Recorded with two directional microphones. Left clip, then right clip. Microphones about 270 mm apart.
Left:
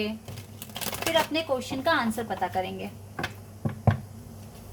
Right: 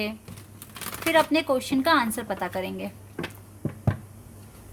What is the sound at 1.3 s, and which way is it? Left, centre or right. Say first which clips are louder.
Speech: right 4 dB; right.